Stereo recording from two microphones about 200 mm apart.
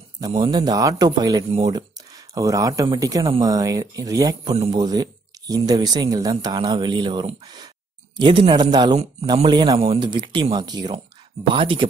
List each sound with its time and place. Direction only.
0.3 s speech: 20° right (ahead or behind)